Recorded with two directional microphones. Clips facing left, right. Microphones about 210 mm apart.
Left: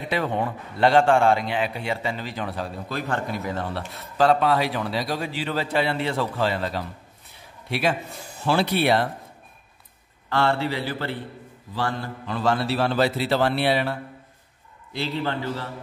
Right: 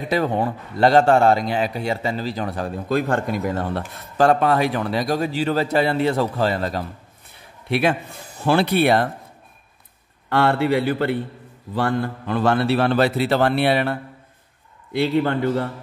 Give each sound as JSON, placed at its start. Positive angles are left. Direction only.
{"t": 0.1, "sound": "a man's voice", "side_deg": -40}
{"t": 8.5, "sound": "a man's voice", "side_deg": -55}
{"t": 10.4, "sound": "a man's voice", "side_deg": -55}